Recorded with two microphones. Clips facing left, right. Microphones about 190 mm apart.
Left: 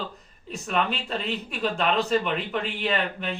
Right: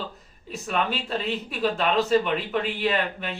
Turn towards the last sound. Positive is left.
turn(degrees=0)  # may be behind; listen again after turning